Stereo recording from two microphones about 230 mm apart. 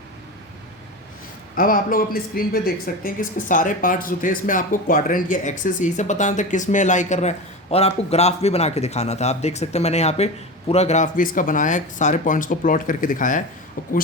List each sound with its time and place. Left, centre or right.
1.5 s speech: left